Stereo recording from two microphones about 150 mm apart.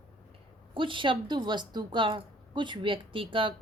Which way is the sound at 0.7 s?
35° right (ahead or behind).